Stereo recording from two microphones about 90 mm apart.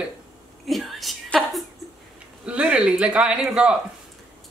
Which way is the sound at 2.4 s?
15° right (ahead or behind).